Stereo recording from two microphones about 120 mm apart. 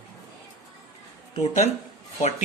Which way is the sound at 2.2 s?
90° left.